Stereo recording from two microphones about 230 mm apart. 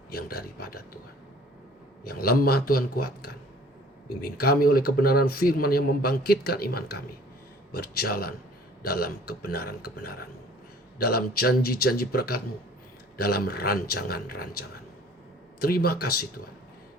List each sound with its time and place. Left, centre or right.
0.1 s speech: left
2.0 s a man's voice: left
15.6 s speech: left